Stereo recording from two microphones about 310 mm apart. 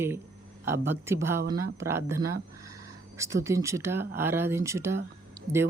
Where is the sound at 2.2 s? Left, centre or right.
Right.